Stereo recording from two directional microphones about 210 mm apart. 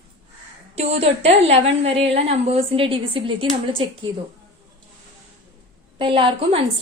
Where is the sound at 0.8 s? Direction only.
30° right (ahead or behind).